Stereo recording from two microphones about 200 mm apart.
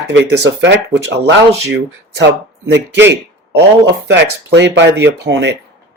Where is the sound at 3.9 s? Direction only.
60° right (ahead or behind).